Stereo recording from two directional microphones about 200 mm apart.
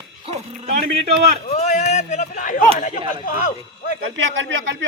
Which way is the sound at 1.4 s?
35° left (ahead or behind).